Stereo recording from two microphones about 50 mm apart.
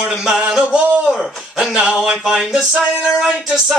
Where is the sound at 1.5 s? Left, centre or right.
Centre.